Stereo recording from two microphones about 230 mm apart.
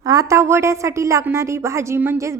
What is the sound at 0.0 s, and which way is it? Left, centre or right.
A woman's voice, centre.